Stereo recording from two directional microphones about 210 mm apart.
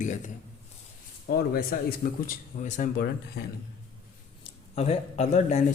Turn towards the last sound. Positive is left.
turn(degrees=30)  # may be behind; listen again after turning